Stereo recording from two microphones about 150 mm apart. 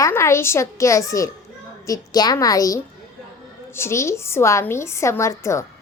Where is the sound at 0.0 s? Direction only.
20° left (ahead or behind).